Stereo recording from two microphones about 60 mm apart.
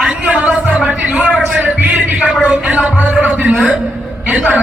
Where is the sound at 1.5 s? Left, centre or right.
Right.